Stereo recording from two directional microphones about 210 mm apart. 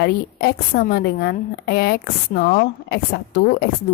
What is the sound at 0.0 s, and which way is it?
A woman's voice, 45° left (ahead or behind).